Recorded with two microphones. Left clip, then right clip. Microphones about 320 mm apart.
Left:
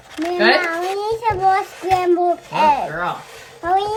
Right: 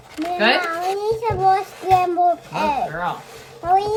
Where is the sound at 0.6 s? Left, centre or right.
Right.